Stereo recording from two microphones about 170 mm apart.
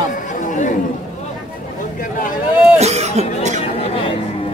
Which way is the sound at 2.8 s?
40° right (ahead or behind).